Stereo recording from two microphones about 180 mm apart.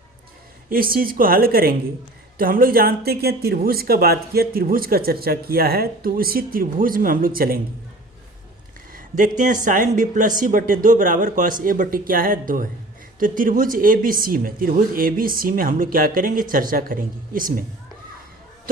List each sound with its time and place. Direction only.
0.7 s speech: 55° right (ahead or behind)
8.9 s a sound: 50° right (ahead or behind)
9.4 s speech: 45° right (ahead or behind)